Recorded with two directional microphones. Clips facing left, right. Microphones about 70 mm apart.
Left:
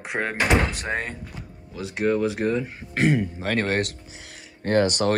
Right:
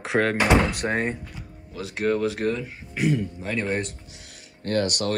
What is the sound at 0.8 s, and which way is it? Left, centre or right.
Speech, right.